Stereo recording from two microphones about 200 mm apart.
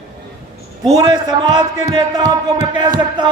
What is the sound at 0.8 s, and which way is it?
A man's voice, 20° right (ahead or behind).